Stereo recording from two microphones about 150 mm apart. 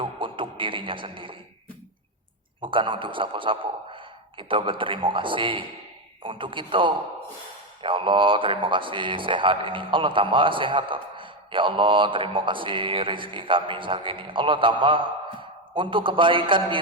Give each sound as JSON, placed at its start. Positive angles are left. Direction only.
{"t": 0.0, "sound": "music", "side_deg": -35}
{"t": 2.6, "sound": "a man's voice", "side_deg": -35}